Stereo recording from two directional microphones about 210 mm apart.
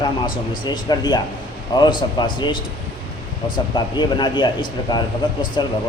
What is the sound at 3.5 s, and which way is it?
Speech, 20° left (ahead or behind).